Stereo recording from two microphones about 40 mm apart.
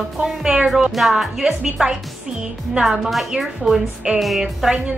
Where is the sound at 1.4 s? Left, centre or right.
Centre.